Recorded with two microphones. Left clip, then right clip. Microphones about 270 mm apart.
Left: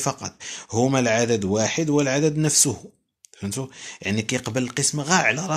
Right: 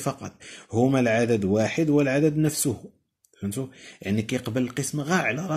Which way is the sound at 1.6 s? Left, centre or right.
Left.